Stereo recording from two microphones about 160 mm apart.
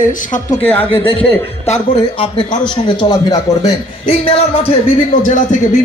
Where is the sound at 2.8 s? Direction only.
25° left (ahead or behind).